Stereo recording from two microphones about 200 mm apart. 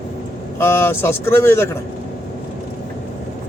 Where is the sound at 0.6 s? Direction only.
10° left (ahead or behind).